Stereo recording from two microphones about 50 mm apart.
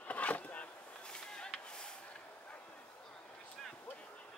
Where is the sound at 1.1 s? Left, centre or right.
Centre.